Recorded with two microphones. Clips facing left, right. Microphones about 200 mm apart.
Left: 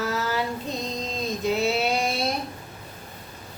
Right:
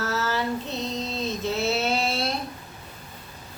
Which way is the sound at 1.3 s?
15° left (ahead or behind).